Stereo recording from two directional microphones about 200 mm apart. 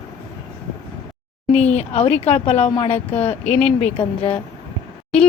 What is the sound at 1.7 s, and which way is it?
A woman's voice, 30° left (ahead or behind).